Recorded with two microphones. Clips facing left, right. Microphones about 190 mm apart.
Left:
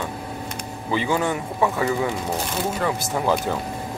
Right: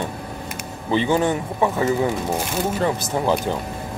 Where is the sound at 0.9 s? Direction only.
25° right (ahead or behind).